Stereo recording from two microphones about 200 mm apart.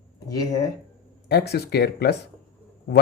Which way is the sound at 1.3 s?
55° left (ahead or behind).